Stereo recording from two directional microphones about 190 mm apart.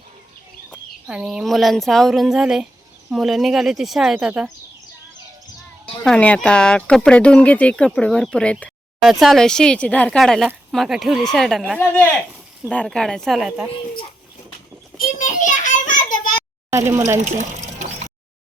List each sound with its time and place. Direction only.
0.7 s speech: 5° right (ahead or behind)
6.1 s speech: 5° left (ahead or behind)
15.2 s children playing: 45° left (ahead or behind)
16.7 s speech: 15° right (ahead or behind)
17.3 s a sound: 40° right (ahead or behind)